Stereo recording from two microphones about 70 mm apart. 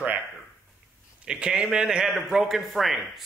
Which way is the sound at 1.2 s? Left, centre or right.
Centre.